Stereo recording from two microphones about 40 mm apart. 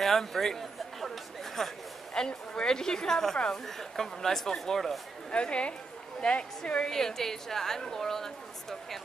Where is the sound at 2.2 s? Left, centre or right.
Centre.